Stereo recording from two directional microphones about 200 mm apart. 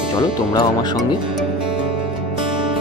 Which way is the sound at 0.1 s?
20° left (ahead or behind).